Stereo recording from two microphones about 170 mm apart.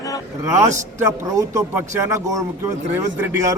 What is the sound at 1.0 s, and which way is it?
Speech, 20° right (ahead or behind).